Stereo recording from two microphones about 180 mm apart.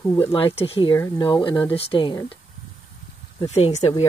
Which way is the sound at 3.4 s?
35° left (ahead or behind).